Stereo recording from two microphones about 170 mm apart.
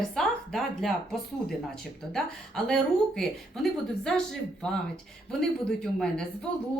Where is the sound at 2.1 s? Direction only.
5° left (ahead or behind).